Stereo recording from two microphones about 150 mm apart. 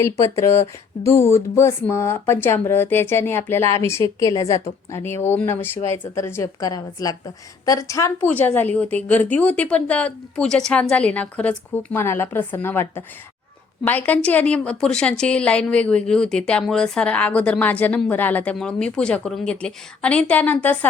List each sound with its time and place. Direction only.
0.0 s a woman's voice: 20° left (ahead or behind)
8.3 s a woman's voice: 10° left (ahead or behind)